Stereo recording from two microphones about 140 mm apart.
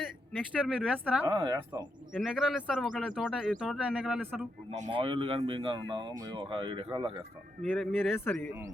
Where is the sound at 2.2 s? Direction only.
Centre (ahead or behind).